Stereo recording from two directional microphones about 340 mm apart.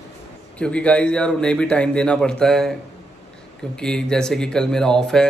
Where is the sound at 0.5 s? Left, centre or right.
Centre.